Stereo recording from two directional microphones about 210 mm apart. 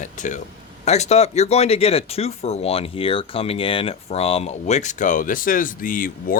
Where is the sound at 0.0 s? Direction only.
35° left (ahead or behind).